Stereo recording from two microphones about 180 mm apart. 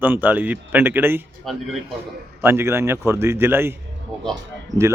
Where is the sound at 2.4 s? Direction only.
15° right (ahead or behind).